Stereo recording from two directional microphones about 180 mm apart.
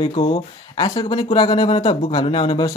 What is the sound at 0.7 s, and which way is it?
Speech, 20° left (ahead or behind).